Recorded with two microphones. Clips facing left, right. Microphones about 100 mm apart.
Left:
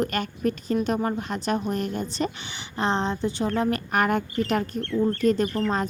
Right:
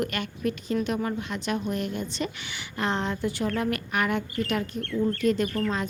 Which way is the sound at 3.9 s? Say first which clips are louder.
Left 4 dB; 45° left (ahead or behind).